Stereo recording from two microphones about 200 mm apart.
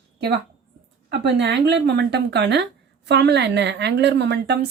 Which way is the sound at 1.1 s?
60° right (ahead or behind).